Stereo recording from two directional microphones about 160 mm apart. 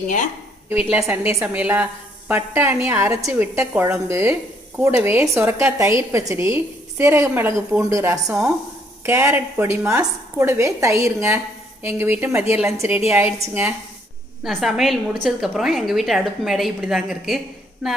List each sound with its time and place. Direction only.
0.9 s a woman's voice: 15° right (ahead or behind)
14.4 s a woman's voice: centre (ahead or behind)